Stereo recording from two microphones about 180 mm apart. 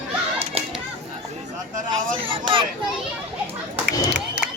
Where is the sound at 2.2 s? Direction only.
30° right (ahead or behind).